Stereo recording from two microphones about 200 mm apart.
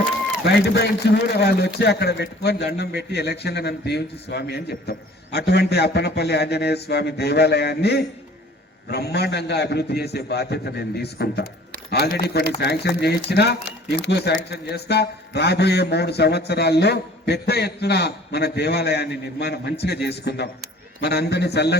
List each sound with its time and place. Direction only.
0.4 s a man's voice: 55° left (ahead or behind)